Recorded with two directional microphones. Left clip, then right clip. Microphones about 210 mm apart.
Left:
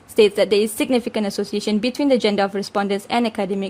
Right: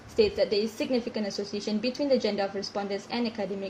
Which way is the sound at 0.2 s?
50° left (ahead or behind).